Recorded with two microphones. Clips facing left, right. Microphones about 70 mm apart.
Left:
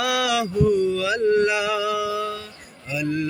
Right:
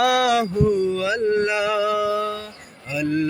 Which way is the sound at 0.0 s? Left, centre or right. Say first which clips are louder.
Right 4 dB; right.